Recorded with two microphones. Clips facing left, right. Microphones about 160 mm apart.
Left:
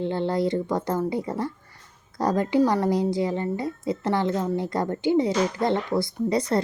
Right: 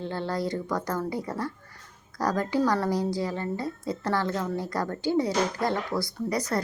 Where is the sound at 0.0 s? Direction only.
20° left (ahead or behind).